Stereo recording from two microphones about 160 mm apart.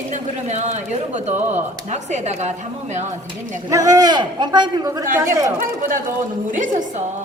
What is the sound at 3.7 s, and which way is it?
A man's voice, 20° right (ahead or behind).